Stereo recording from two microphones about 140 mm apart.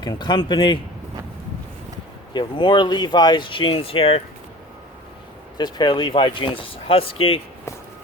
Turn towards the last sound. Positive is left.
turn(degrees=40)  # may be behind; listen again after turning